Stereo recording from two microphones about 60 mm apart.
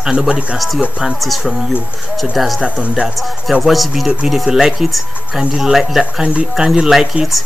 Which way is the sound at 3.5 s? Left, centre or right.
Centre.